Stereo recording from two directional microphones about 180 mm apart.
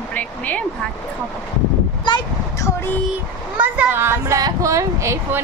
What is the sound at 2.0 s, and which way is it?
Speech, 20° left (ahead or behind).